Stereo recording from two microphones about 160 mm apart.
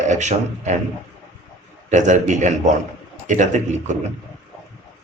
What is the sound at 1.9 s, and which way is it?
A man's voice, 50° right (ahead or behind).